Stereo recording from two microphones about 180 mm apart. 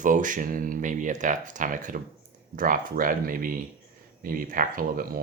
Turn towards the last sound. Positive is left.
turn(degrees=-50)  # may be behind; listen again after turning